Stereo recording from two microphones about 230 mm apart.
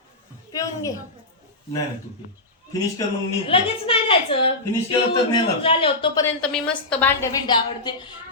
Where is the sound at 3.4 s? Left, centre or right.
Left.